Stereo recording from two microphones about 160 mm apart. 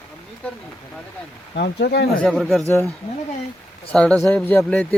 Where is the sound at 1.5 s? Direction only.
90° left.